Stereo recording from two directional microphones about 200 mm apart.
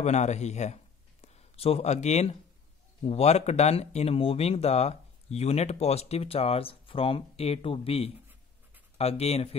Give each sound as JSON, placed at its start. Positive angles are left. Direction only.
{"t": 0.0, "sound": "speech", "side_deg": 35}